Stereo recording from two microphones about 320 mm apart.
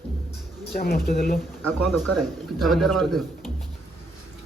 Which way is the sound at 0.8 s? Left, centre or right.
Left.